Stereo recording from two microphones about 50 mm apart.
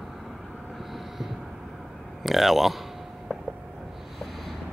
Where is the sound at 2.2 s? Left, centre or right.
Centre.